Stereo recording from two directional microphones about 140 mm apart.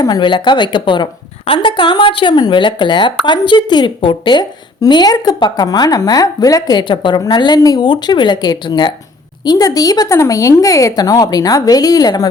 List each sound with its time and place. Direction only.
0.0 s a woman's voice: 30° left (ahead or behind)